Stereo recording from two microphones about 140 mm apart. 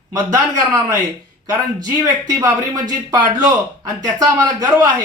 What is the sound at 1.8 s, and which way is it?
Speech, 25° right (ahead or behind).